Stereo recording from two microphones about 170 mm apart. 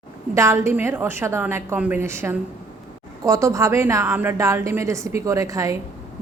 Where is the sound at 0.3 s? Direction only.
15° right (ahead or behind).